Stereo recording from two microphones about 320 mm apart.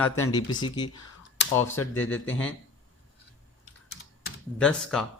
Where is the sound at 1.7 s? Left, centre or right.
Left.